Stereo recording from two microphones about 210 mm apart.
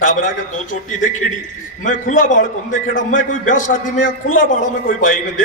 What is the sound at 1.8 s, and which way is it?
A man's voice, 40° left (ahead or behind).